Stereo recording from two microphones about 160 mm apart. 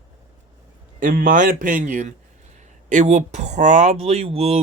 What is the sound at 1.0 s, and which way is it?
Speech, 60° right (ahead or behind).